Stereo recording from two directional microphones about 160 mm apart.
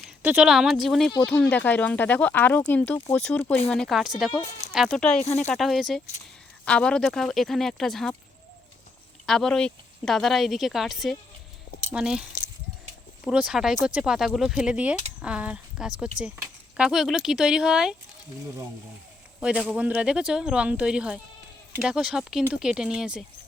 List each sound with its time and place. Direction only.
0.0 s speech: 10° right (ahead or behind)
5.2 s speech: 45° left (ahead or behind)
5.5 s speech: centre (ahead or behind)
9.2 s speech: centre (ahead or behind)
19.4 s speech: 5° right (ahead or behind)